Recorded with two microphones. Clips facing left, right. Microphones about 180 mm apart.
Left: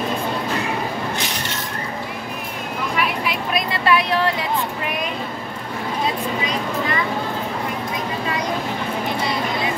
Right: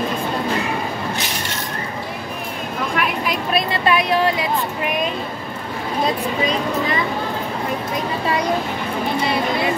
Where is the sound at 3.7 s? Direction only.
20° right (ahead or behind).